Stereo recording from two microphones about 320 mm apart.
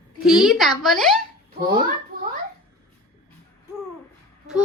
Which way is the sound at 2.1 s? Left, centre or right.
Right.